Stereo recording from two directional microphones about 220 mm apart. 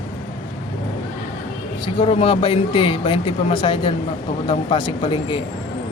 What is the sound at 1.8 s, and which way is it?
Speech, 25° left (ahead or behind).